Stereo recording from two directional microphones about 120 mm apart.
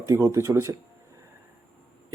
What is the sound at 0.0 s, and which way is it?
Speech, 25° right (ahead or behind).